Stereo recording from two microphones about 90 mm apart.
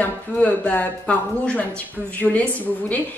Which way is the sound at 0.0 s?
15° left (ahead or behind).